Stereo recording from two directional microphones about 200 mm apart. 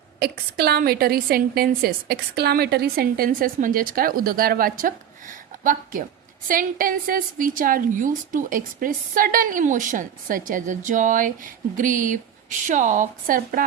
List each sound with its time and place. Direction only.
0.2 s a woman's voice: 50° right (ahead or behind)